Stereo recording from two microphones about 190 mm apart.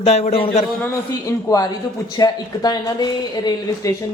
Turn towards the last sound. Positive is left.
turn(degrees=15)  # may be behind; listen again after turning